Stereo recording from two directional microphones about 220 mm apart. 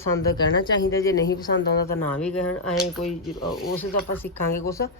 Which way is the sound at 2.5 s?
85° left.